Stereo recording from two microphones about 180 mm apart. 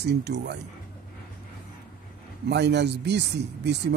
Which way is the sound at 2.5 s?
70° right (ahead or behind).